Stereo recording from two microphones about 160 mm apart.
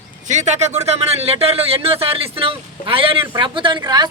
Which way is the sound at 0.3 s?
45° right (ahead or behind).